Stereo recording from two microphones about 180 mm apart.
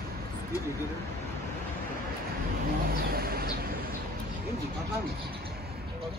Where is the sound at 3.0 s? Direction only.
55° right (ahead or behind).